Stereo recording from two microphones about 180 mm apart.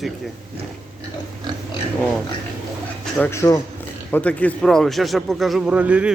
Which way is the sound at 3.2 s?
15° left (ahead or behind).